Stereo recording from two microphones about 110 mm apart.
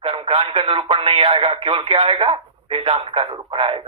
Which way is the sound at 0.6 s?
60° right (ahead or behind).